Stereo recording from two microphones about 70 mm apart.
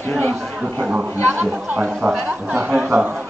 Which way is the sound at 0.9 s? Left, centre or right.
Right.